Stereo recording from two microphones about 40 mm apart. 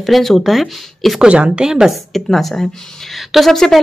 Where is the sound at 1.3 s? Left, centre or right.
Right.